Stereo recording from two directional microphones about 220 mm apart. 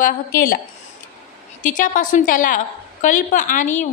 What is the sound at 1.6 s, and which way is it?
A woman's voice, 40° left (ahead or behind).